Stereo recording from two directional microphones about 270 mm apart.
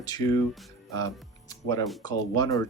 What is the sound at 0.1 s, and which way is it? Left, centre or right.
Speech, centre.